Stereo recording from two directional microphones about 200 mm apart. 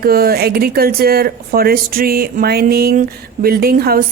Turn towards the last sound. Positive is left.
turn(degrees=-50)  # may be behind; listen again after turning